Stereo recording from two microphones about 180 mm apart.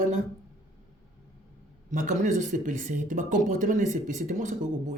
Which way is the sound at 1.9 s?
45° right (ahead or behind).